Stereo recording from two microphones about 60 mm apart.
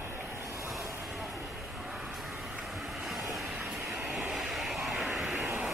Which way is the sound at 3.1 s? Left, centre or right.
Centre.